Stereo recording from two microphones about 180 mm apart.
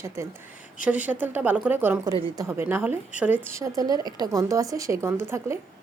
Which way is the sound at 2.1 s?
30° right (ahead or behind).